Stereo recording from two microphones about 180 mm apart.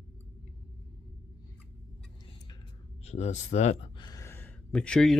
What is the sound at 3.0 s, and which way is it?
Speech, 40° left (ahead or behind).